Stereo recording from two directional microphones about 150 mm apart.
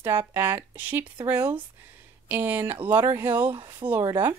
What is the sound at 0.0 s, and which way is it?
Speech, 15° right (ahead or behind).